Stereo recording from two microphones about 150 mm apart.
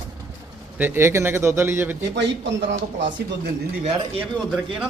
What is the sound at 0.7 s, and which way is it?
Speech, 15° right (ahead or behind).